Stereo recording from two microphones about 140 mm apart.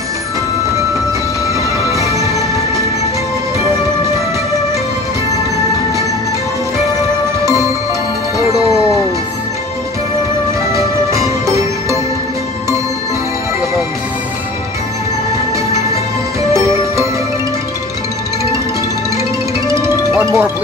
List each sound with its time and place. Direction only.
1.9 s music: 20° right (ahead or behind)
10.7 s music: 20° right (ahead or behind)
16.5 s music: 20° right (ahead or behind)
20.2 s music: 15° right (ahead or behind)